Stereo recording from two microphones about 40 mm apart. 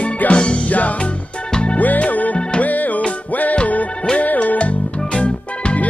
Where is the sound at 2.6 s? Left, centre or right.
Left.